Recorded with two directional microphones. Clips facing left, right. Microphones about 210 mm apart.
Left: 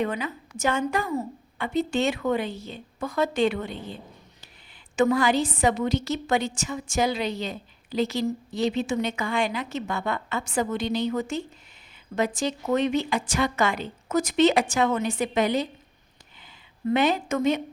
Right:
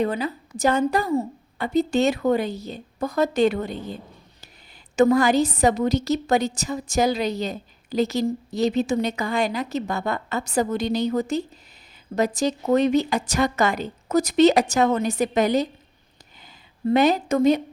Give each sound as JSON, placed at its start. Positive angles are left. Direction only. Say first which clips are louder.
{"t": 0.0, "sound": "a woman's voice", "louder": "right 4 dB", "side_deg": -35}
{"t": 4.9, "sound": "a woman's voice", "louder": "right 4 dB", "side_deg": -40}
{"t": 16.8, "sound": "a woman's voice", "louder": "right 4 dB", "side_deg": -40}